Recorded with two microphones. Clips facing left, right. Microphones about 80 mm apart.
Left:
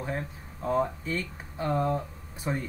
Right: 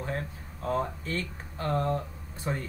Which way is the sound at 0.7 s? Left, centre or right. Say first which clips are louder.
Left 3 dB; centre.